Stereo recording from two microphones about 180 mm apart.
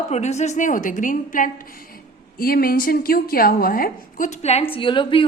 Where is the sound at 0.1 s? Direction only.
40° left (ahead or behind).